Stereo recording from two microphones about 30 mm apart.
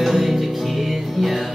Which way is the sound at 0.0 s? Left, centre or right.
Centre.